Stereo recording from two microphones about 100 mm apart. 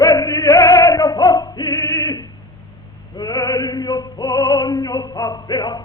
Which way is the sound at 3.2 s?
40° left (ahead or behind).